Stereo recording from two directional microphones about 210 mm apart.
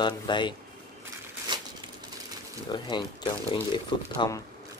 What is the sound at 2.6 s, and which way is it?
Speech, 20° left (ahead or behind).